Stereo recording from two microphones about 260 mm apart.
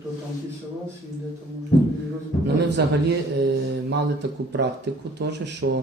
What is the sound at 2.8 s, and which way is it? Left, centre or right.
Speech, right.